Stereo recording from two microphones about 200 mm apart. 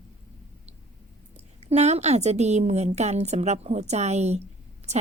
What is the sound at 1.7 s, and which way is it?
A woman's voice, 35° right (ahead or behind).